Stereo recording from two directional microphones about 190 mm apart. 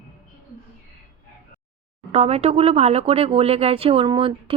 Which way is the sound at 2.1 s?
35° right (ahead or behind).